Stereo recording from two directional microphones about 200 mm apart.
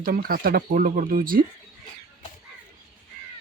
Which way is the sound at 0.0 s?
45° right (ahead or behind).